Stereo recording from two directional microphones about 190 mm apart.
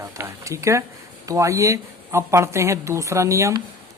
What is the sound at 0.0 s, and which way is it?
Speech, 15° right (ahead or behind).